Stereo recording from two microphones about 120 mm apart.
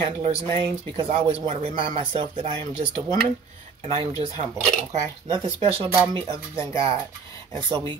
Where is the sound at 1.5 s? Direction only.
90° right.